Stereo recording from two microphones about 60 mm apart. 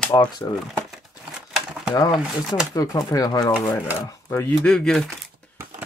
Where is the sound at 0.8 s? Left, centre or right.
Centre.